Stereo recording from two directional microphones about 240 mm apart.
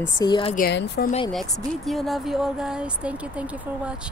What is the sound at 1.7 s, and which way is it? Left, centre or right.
Speech, centre.